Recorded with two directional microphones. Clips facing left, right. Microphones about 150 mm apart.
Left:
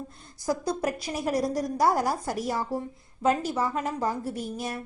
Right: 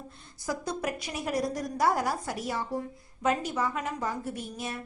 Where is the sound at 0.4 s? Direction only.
35° left (ahead or behind).